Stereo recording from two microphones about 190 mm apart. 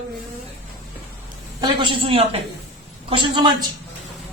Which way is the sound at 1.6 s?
30° right (ahead or behind).